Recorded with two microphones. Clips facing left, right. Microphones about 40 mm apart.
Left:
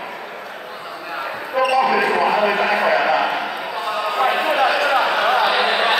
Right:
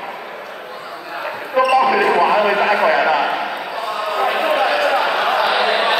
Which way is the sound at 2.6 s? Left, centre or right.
Right.